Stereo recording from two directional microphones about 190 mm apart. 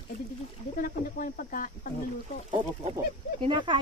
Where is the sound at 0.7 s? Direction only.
50° left (ahead or behind).